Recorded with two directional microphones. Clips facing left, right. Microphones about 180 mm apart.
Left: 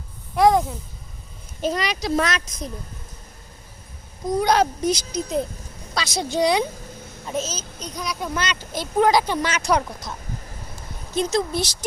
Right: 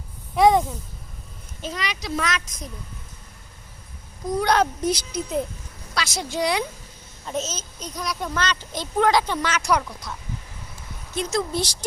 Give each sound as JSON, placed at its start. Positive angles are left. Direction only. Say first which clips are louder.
{"t": 0.3, "sound": "a child's voice", "louder": "even", "side_deg": 0}
{"t": 1.6, "sound": "speech", "louder": "left 7 dB", "side_deg": 40}
{"t": 4.4, "sound": "a woman's voice", "louder": "left 1 dB", "side_deg": 15}
{"t": 7.3, "sound": "a child's voice", "louder": "left 1 dB", "side_deg": 0}
{"t": 8.3, "sound": "speech", "louder": "even", "side_deg": 10}
{"t": 11.1, "sound": "a woman's voice", "louder": "left 3 dB", "side_deg": 20}
{"t": 11.6, "sound": "speech", "louder": "left 1 dB", "side_deg": -15}